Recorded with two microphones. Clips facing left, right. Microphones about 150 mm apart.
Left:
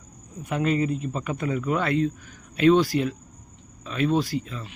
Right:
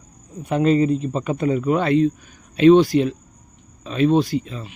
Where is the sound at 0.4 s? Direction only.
30° right (ahead or behind).